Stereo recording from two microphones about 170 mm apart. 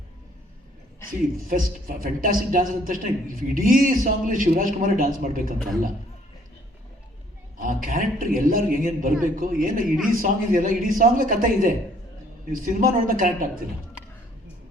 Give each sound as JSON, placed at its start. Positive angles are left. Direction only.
{"t": 1.5, "sound": "a woman's voice", "side_deg": -55}
{"t": 7.6, "sound": "a woman's voice", "side_deg": -55}